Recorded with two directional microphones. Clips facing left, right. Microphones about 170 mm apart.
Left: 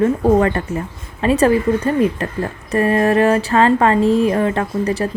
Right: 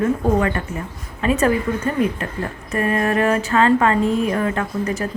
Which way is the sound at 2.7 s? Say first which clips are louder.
Left 5 dB; 35° left (ahead or behind).